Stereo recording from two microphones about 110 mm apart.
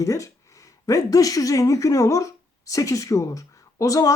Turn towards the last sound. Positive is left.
turn(degrees=30)  # may be behind; listen again after turning